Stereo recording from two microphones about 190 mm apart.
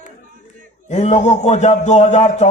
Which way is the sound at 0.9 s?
35° left (ahead or behind).